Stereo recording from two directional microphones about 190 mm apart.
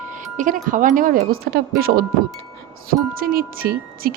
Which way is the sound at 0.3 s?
45° right (ahead or behind).